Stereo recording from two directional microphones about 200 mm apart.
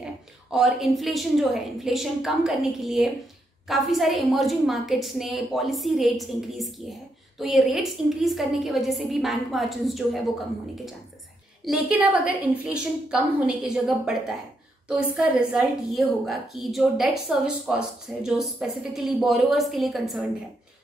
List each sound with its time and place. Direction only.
0.5 s a woman's voice: centre (ahead or behind)
11.6 s a woman's voice: centre (ahead or behind)